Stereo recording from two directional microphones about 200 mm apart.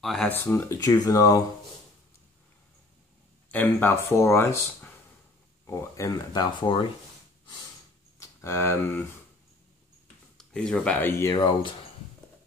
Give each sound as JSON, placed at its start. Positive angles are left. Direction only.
{"t": 0.0, "sound": "speech", "side_deg": 0}
{"t": 3.5, "sound": "speech", "side_deg": 10}
{"t": 8.2, "sound": "speech", "side_deg": 15}
{"t": 10.3, "sound": "speech", "side_deg": 5}
{"t": 11.3, "sound": "speech", "side_deg": 25}